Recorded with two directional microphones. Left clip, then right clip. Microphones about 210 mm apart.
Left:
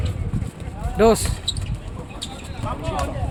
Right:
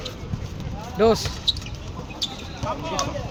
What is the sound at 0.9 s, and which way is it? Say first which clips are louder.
Speech: left 3 dB; 25° left (ahead or behind).